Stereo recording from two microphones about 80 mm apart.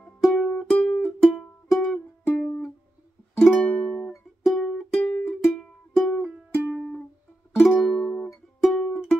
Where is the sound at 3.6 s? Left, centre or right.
Centre.